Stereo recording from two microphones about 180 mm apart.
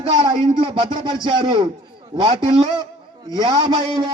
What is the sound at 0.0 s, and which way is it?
A man's voice, 25° right (ahead or behind).